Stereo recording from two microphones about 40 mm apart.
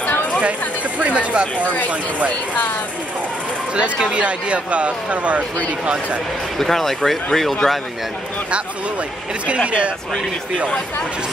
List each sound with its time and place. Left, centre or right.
0.4 s speech: right
2.2 s speech: left
3.7 s speech: right
6.6 s speech: centre